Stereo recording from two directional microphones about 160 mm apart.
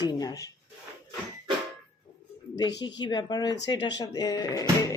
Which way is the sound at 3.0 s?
25° left (ahead or behind).